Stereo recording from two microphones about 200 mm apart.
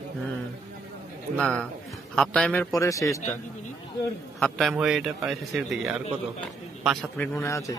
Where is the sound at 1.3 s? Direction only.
5° left (ahead or behind).